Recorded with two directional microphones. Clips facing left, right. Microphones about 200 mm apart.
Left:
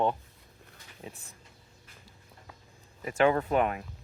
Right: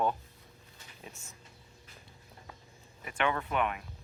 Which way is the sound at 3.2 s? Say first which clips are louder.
Left 7 dB; 35° left (ahead or behind).